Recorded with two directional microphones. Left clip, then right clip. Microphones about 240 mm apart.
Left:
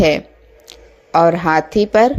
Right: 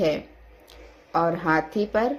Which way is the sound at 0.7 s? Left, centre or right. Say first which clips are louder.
Left 10 dB; left.